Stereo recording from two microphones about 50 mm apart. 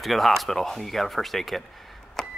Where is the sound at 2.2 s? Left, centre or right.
Centre.